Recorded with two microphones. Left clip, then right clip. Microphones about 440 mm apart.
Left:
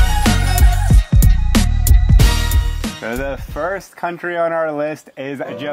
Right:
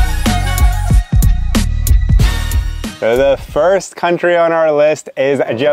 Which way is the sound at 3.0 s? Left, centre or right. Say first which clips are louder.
Right 14 dB; right.